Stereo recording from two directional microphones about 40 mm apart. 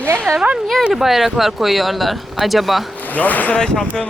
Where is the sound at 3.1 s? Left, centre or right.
Left.